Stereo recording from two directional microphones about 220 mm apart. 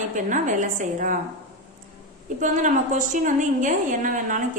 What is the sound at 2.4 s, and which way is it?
A woman's voice, 35° right (ahead or behind).